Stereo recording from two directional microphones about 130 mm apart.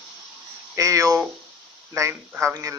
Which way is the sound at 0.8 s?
25° right (ahead or behind).